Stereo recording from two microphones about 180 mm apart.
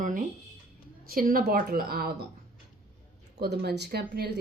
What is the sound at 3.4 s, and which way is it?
Speech, 65° right (ahead or behind).